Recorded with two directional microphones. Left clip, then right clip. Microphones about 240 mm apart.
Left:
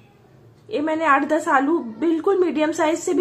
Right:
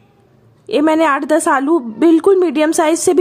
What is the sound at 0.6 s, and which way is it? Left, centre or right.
A woman's voice, right.